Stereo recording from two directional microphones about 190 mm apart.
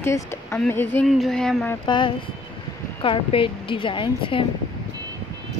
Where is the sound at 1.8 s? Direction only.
25° left (ahead or behind).